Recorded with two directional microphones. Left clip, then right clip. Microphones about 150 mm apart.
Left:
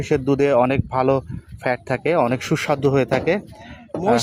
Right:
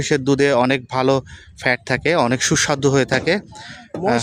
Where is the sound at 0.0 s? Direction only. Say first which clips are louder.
Right 2 dB; 30° right (ahead or behind).